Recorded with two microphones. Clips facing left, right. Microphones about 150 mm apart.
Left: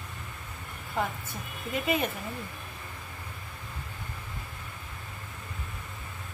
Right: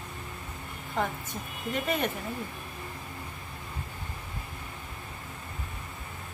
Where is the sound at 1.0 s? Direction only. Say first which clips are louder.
Right 1 dB; 5° left (ahead or behind).